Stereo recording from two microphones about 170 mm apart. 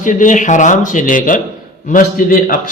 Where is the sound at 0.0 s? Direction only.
50° left (ahead or behind).